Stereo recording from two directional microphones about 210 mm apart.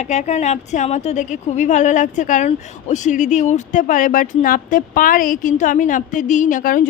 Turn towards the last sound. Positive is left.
turn(degrees=40)  # may be behind; listen again after turning